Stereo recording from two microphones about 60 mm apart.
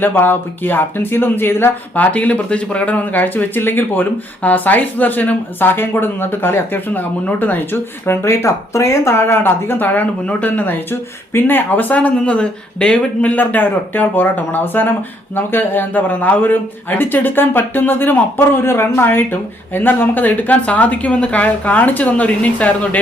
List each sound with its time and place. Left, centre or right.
0.0 s speech: left
2.1 s speech: left
8.0 s a man's voice: left; by 13.3 s centre
13.3 s speech: left